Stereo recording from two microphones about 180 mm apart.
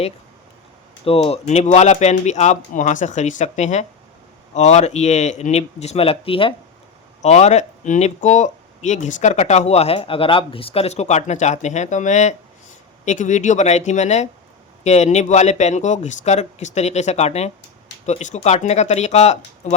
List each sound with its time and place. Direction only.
1.0 s speech: 30° left (ahead or behind)